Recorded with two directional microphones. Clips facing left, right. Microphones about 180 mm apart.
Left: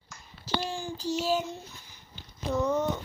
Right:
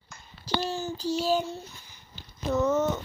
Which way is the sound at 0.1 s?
35° right (ahead or behind).